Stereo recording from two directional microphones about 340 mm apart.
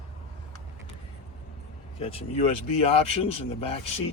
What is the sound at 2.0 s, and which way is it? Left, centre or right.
Speech, centre.